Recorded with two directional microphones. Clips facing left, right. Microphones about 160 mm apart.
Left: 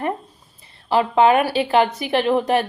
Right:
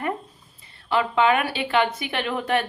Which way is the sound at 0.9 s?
35° left (ahead or behind).